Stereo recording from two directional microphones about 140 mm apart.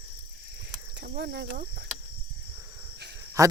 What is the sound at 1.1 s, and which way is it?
Cricket, 90° right.